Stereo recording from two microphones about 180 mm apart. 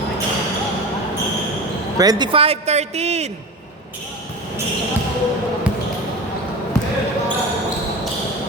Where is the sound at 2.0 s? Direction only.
20° right (ahead or behind).